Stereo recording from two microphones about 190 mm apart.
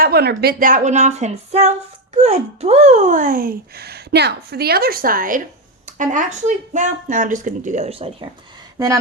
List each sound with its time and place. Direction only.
0.0 s speech: 55° right (ahead or behind); by 8.3 s 30° right (ahead or behind)